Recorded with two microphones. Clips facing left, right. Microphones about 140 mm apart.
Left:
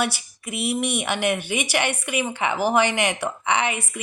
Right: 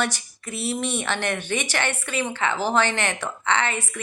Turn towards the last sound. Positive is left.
turn(degrees=15)  # may be behind; listen again after turning